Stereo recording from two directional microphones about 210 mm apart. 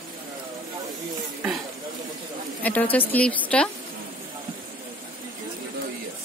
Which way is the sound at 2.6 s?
5° left (ahead or behind).